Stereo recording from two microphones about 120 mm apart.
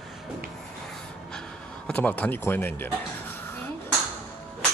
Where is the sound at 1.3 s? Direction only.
10° left (ahead or behind).